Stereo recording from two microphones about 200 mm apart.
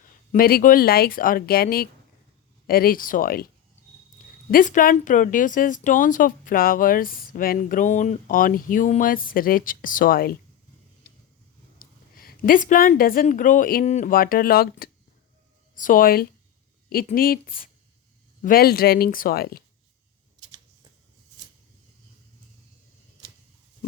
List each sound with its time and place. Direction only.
0.0 s speech: 45° left (ahead or behind)
4.5 s speech: 40° left (ahead or behind)
11.8 s a woman's voice: 45° left (ahead or behind)